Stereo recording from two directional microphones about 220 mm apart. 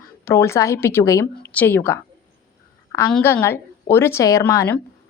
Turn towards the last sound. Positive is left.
turn(degrees=10)  # may be behind; listen again after turning